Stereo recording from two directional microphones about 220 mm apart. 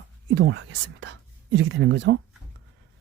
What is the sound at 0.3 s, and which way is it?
Speech, 50° right (ahead or behind).